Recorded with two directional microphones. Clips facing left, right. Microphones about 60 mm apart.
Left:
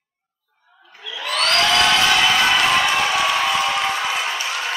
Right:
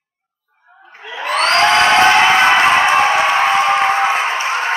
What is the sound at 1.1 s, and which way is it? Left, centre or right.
Crowd, right.